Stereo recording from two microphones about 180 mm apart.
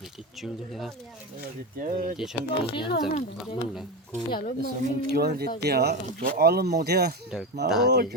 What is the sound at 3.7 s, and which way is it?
Speech, centre (ahead or behind).